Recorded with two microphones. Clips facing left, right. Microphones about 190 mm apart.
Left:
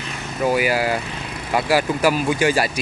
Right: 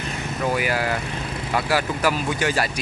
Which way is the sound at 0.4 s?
10° left (ahead or behind).